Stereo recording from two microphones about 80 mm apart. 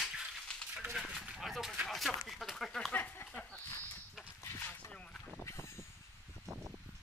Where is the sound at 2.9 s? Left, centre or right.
Left.